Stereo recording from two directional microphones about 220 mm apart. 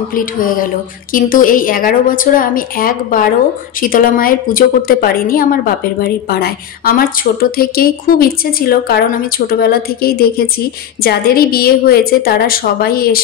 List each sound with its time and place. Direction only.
0.1 s a woman's voice: 40° left (ahead or behind)